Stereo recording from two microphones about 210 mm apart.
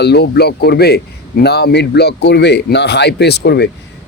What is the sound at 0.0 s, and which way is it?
A man's voice, 50° left (ahead or behind).